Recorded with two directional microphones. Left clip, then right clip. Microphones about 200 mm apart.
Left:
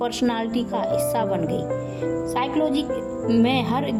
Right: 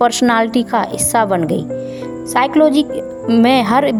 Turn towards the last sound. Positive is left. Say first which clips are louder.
# right 10 dB
turn(degrees=-50)  # may be behind; listen again after turning